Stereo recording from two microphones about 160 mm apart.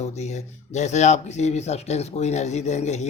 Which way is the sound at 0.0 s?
45° left (ahead or behind).